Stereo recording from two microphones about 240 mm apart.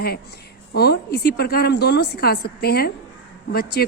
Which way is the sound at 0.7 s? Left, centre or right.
Left.